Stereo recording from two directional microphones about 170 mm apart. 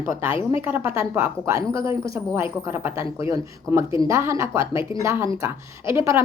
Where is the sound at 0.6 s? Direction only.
15° right (ahead or behind).